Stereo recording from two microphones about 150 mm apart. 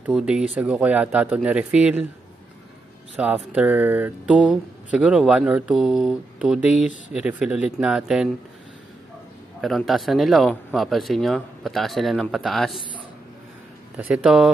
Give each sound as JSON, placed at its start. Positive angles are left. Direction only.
{"t": 0.0, "sound": "speech", "side_deg": -5}
{"t": 3.2, "sound": "speech", "side_deg": -10}
{"t": 9.6, "sound": "speech", "side_deg": 0}
{"t": 13.9, "sound": "speech", "side_deg": -5}